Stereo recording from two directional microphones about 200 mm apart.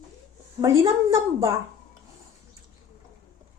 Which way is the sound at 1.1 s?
15° right (ahead or behind).